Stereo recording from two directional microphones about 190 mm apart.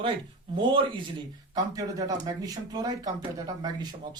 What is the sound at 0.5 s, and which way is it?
A man's voice, 25° right (ahead or behind).